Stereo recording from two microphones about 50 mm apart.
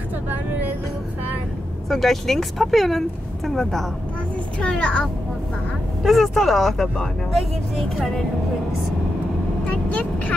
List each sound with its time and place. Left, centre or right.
0.3 s vehicle: right
1.9 s speech: centre
4.6 s a child's voice: left
6.0 s speech: centre
9.7 s speech: left